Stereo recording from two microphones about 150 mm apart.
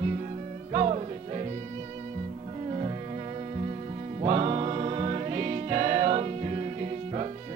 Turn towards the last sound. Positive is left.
turn(degrees=-40)  # may be behind; listen again after turning